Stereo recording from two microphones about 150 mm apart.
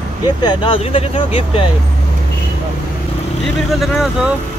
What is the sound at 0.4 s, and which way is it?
Speech, 30° left (ahead or behind).